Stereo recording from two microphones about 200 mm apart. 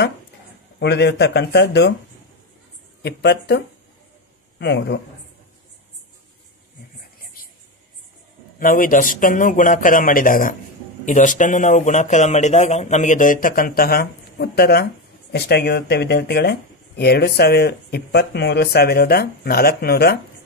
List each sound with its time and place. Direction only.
0.7 s speech: 60° left (ahead or behind)
3.0 s speech: 55° left (ahead or behind)
7.4 s a sound: 45° left (ahead or behind)
8.5 s a man's voice: 45° left (ahead or behind)